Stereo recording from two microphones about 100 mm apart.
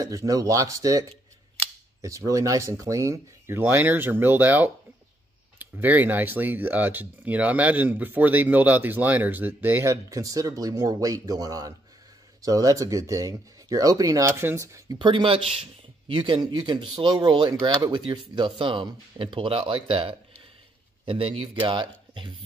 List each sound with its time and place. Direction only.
0.0 s speech: 35° right (ahead or behind); by 9.9 s 20° right (ahead or behind)
10.0 s speech: 35° right (ahead or behind)
15.0 s speech: 55° right (ahead or behind)
16.3 s speech: 45° right (ahead or behind)